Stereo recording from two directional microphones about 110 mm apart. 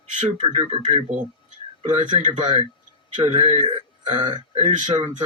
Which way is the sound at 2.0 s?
90° right.